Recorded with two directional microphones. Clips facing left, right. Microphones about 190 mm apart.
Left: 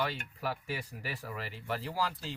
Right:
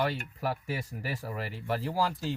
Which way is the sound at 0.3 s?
45° right (ahead or behind).